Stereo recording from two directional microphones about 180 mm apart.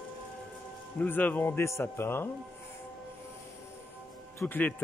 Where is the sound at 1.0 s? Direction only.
10° left (ahead or behind).